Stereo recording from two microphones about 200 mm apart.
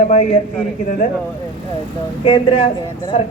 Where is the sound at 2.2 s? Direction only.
25° left (ahead or behind).